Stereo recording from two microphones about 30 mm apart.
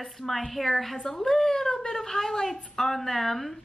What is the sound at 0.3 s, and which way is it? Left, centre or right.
Speech, centre.